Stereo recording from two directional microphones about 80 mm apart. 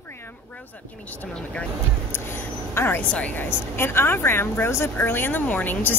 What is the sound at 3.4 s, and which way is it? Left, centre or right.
A woman's voice, left.